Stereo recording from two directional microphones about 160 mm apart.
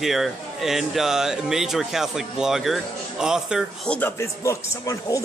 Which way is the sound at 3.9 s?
10° left (ahead or behind).